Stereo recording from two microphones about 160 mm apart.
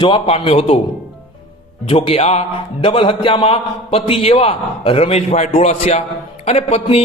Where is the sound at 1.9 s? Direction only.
40° left (ahead or behind).